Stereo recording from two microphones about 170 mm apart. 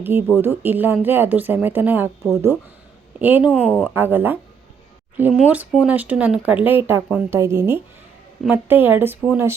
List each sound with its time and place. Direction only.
0.0 s speech: 10° right (ahead or behind)
3.2 s speech: 10° right (ahead or behind)
3.5 s speech: 5° left (ahead or behind)
3.9 s speech: 10° right (ahead or behind)